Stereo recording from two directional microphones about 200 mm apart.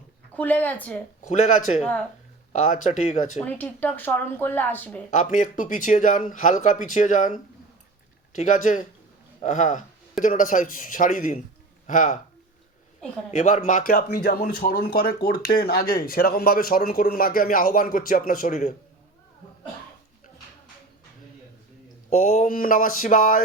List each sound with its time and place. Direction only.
0.3 s speech: 10° left (ahead or behind)
1.2 s speech: 40° left (ahead or behind)
1.8 s speech: 5° left (ahead or behind)
3.4 s speech: 10° left (ahead or behind)
5.1 s speech: 40° left (ahead or behind)
8.4 s speech: 40° left (ahead or behind)
13.3 s speech: 40° left (ahead or behind)
22.2 s speech: 40° left (ahead or behind)